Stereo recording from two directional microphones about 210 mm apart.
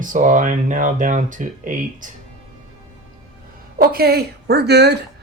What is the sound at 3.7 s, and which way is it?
Speech, 45° right (ahead or behind).